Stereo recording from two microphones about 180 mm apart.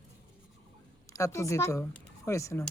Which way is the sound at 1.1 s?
15° left (ahead or behind).